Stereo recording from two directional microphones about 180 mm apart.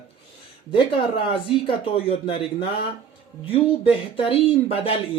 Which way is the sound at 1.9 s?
30° left (ahead or behind).